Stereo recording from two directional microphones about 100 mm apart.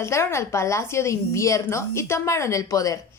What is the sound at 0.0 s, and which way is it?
A woman's voice, 30° left (ahead or behind).